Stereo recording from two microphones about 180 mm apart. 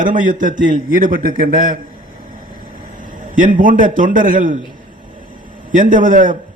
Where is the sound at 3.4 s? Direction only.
45° right (ahead or behind).